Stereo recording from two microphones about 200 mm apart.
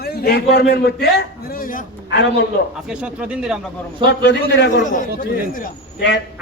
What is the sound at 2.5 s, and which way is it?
Speech, 55° left (ahead or behind).